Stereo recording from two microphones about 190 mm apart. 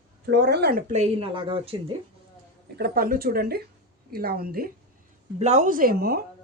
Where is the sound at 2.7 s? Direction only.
55° right (ahead or behind).